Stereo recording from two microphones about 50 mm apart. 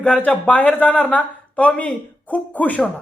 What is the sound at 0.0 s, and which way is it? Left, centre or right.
Speech, left.